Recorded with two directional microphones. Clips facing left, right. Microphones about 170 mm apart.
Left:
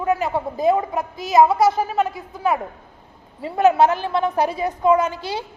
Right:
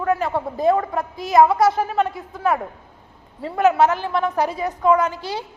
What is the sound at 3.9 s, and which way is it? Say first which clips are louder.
A woman's voice: left 1 dB; 25° left (ahead or behind).